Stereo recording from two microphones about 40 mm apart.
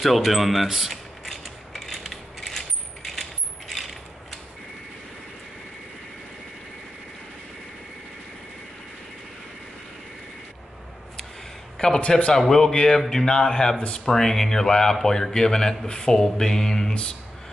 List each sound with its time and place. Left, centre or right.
0.0 s speech: centre
1.3 s mechanisms: centre
2.4 s coin: centre
11.8 s a sound: left
12.4 s a man's voice: centre
14.1 s a man's voice: centre